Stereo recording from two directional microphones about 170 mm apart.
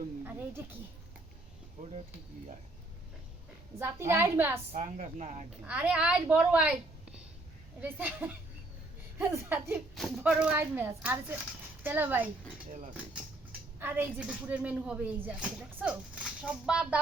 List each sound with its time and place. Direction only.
0.3 s speech: 10° right (ahead or behind)
3.8 s speech: 15° right (ahead or behind)
4.7 s speech: 45° right (ahead or behind)
5.6 s speech: 10° right (ahead or behind)
7.8 s speech: 10° right (ahead or behind)
9.9 s speech: centre (ahead or behind)
10.3 s speech: 10° right (ahead or behind)
13.7 s speech: 10° right (ahead or behind)